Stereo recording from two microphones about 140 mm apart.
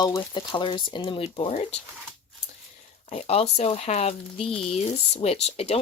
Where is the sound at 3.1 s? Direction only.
45° left (ahead or behind).